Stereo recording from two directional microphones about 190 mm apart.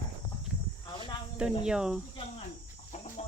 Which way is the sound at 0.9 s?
25° left (ahead or behind).